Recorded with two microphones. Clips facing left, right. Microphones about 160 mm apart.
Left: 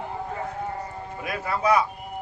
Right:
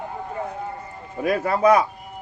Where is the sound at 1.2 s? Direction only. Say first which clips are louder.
Right 8 dB; 45° right (ahead or behind).